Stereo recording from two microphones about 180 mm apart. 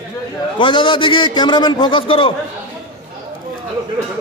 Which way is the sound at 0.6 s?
25° left (ahead or behind).